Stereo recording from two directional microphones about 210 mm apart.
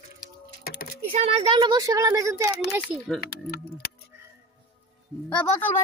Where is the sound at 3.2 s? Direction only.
50° left (ahead or behind).